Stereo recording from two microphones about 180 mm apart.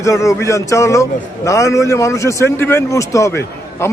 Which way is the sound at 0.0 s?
15° left (ahead or behind).